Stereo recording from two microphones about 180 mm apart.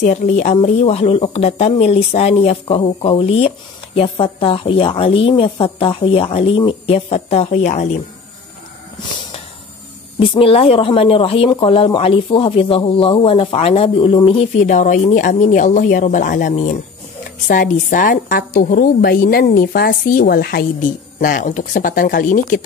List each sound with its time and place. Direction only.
0.0 s speech: 40° left (ahead or behind)
10.1 s speech: 30° left (ahead or behind)
14.6 s a woman's voice: 45° left (ahead or behind)